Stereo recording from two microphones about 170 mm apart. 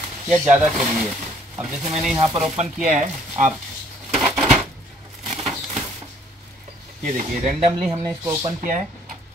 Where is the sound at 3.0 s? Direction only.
45° right (ahead or behind).